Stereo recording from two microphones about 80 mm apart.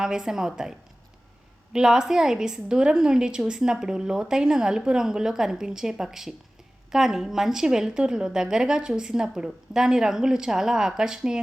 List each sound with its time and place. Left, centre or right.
0.0 s a woman's voice: centre